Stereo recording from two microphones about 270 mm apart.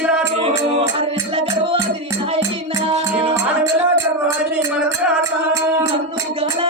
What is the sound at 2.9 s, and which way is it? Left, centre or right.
Music, right.